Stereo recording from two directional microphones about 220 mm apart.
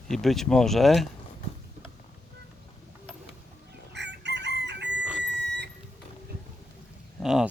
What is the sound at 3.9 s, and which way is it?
Chicken, 50° right (ahead or behind).